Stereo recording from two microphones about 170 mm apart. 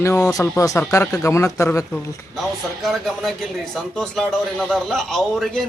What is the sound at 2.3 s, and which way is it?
Speech, centre (ahead or behind).